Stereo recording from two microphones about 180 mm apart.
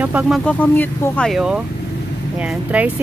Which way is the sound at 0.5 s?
10° left (ahead or behind).